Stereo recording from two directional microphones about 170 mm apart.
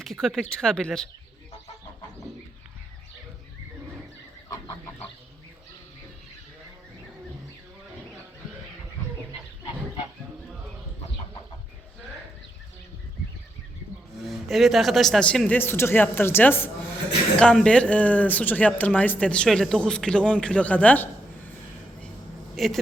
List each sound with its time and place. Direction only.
0.0 s speech: centre (ahead or behind)
4.4 s chicken: 15° left (ahead or behind)
14.3 s speech: centre (ahead or behind)
22.5 s speech: centre (ahead or behind)